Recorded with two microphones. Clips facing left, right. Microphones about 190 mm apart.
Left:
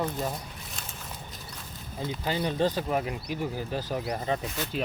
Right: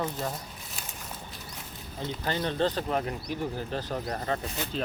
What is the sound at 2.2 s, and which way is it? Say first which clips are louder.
Speech: left 1 dB; 10° left (ahead or behind).